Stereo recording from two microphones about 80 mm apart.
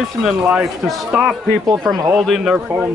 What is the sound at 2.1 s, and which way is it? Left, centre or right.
Speech, centre.